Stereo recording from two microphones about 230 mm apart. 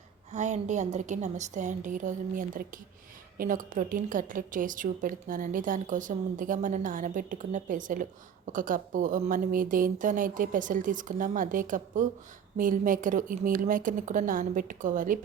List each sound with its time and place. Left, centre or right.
0.3 s a woman's voice: right